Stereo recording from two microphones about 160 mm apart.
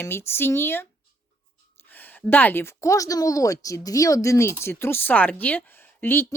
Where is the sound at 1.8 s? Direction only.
10° left (ahead or behind).